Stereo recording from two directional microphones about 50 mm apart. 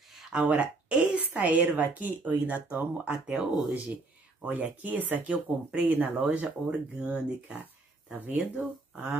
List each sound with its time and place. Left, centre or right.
0.3 s a woman's voice: right